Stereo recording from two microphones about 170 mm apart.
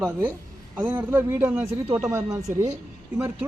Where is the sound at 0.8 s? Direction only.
10° right (ahead or behind).